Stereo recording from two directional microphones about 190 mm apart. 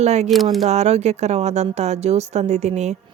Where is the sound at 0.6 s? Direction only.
35° right (ahead or behind).